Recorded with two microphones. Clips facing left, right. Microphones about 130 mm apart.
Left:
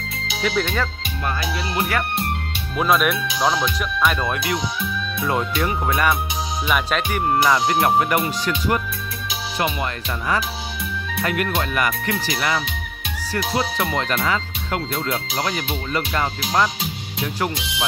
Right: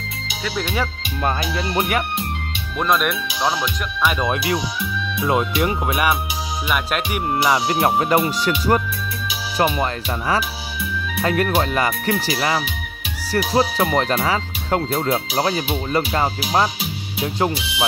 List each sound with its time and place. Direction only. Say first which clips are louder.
0.4 s speech: left 2 dB; 5° right (ahead or behind)
1.8 s speech: right 2 dB; 20° right (ahead or behind)
2.8 s speech: left 1 dB; centre (ahead or behind)
4.3 s speech: right 2 dB; 25° right (ahead or behind)
7.8 s speech: right 1 dB; 25° right (ahead or behind)
17.2 s speech: right 3 dB; 20° right (ahead or behind)